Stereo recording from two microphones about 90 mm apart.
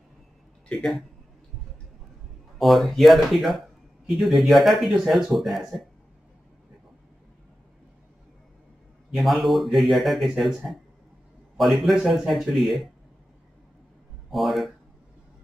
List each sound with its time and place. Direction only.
2.6 s speech: centre (ahead or behind)
9.1 s speech: centre (ahead or behind)
14.3 s speech: centre (ahead or behind)